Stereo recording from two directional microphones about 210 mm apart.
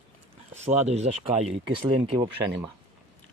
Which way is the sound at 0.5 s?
30° right (ahead or behind).